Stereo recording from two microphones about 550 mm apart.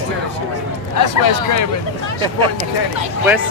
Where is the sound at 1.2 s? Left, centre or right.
Left.